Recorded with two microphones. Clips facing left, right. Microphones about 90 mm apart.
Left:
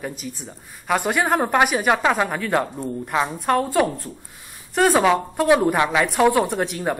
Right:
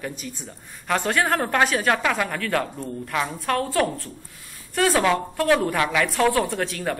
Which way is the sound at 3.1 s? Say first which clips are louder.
Left 4 dB; 20° left (ahead or behind).